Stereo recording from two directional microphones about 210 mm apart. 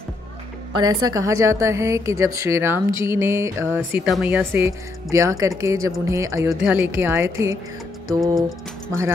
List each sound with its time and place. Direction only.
0.7 s a woman's voice: 20° right (ahead or behind)
8.4 s speech: centre (ahead or behind)